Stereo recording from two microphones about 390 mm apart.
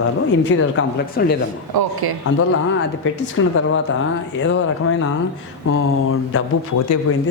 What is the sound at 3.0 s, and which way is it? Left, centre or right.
Mantra, left.